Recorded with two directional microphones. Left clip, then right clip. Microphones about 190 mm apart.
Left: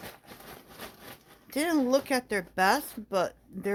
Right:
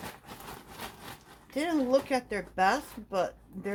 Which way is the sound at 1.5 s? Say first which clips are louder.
Left 1 dB; 55° left (ahead or behind).